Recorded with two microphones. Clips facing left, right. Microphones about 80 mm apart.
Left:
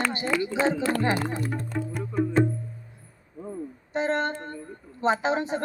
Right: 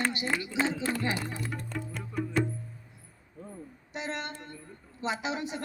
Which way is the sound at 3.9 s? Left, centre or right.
Left.